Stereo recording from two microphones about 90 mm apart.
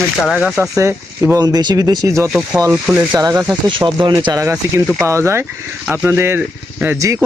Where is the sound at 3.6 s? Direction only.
55° right (ahead or behind).